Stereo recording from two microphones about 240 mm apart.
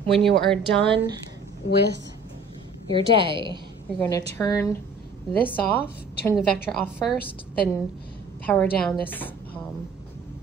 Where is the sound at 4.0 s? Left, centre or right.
Centre.